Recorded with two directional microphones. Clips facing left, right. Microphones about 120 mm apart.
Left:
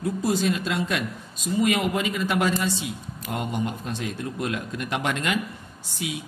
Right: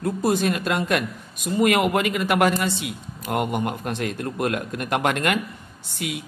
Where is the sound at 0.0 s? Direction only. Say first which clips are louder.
Right 2 dB; 55° right (ahead or behind).